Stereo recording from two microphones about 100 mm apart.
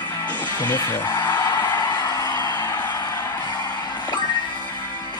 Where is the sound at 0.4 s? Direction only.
45° left (ahead or behind).